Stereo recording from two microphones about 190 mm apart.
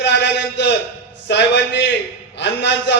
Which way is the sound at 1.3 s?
65° left (ahead or behind).